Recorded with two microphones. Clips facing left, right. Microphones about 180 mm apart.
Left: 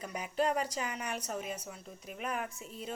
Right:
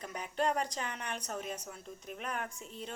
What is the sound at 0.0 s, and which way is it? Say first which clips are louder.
A woman's voice: left 1 dB; 10° left (ahead or behind).